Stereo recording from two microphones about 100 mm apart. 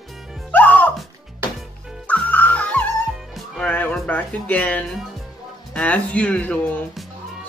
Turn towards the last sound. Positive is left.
turn(degrees=15)  # may be behind; listen again after turning